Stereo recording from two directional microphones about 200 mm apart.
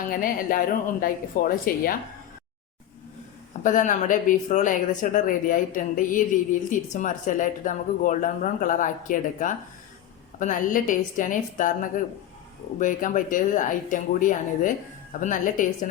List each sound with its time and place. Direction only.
0.1 s speech: 45° left (ahead or behind)
3.6 s speech: 40° left (ahead or behind)